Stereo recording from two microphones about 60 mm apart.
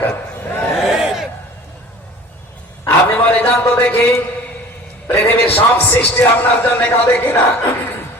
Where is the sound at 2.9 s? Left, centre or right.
Left.